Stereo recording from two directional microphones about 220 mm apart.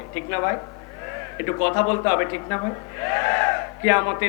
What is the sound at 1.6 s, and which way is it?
Speech, 15° left (ahead or behind).